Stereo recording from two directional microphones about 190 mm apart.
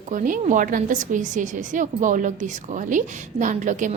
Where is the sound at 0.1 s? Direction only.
40° right (ahead or behind).